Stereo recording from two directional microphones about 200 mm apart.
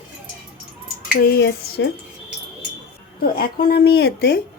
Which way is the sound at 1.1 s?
55° left (ahead or behind).